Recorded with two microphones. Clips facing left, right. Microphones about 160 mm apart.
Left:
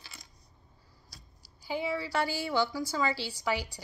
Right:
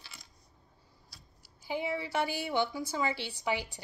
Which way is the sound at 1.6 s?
20° right (ahead or behind).